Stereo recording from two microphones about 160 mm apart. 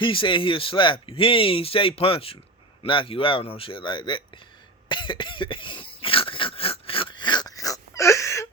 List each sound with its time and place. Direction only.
0.0 s speech: 30° left (ahead or behind)
4.9 s cough: 30° left (ahead or behind)